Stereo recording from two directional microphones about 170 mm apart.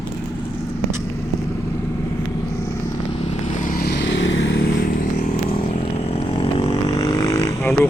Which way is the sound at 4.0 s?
90° left.